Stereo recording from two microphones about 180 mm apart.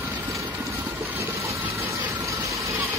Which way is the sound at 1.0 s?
15° right (ahead or behind).